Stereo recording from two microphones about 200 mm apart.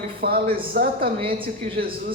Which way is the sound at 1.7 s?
50° right (ahead or behind).